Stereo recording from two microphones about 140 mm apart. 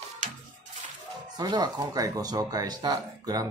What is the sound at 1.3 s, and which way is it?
Speech, 30° right (ahead or behind).